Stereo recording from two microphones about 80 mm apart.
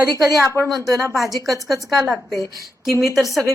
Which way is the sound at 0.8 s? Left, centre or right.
Right.